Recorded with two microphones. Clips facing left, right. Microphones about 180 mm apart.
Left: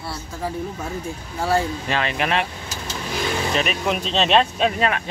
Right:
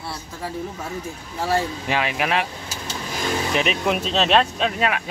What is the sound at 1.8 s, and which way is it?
Speech, 10° right (ahead or behind).